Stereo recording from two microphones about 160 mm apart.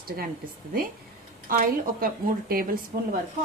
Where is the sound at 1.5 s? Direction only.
60° right (ahead or behind).